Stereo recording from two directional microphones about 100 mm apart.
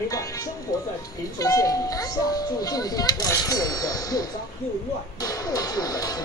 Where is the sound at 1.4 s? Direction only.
35° left (ahead or behind).